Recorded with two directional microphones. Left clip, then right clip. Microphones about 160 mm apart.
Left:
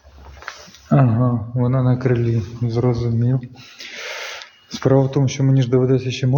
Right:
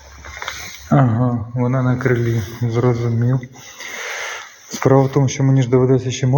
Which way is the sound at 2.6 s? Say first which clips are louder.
Right 2 dB; 5° left (ahead or behind).